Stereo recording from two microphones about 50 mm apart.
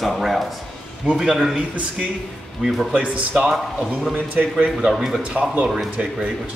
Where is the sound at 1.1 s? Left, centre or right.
Centre.